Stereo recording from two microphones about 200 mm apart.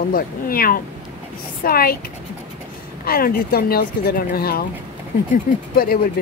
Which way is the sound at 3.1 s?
50° left (ahead or behind).